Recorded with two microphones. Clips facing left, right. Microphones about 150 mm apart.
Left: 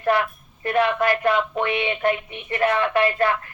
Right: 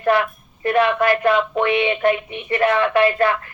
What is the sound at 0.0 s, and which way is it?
A man's voice, 90° right.